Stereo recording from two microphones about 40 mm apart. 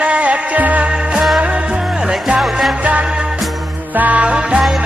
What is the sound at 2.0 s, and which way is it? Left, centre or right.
Music, centre.